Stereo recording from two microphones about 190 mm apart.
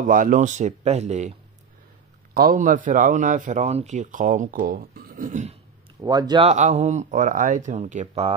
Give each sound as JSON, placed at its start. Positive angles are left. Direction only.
{"t": 0.0, "sound": "speech", "side_deg": -45}
{"t": 2.3, "sound": "speech", "side_deg": -45}
{"t": 5.9, "sound": "a man's voice", "side_deg": -20}
{"t": 6.5, "sound": "speech", "side_deg": -35}